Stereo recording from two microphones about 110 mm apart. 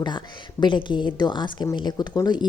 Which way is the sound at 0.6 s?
45° left (ahead or behind).